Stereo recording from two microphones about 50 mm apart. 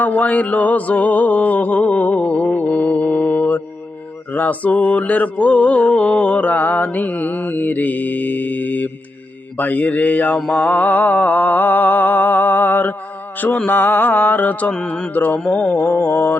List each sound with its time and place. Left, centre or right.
0.0 s music: left
4.3 s mantra: left
15.4 s music: left
15.7 s mantra: left